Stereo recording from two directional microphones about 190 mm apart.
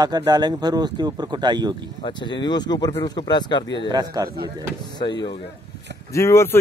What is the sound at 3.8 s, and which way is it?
Speech, 20° right (ahead or behind).